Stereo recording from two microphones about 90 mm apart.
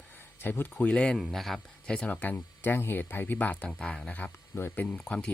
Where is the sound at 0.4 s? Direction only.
20° left (ahead or behind).